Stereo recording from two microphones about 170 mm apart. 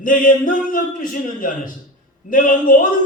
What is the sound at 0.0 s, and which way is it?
A man's voice, 50° left (ahead or behind).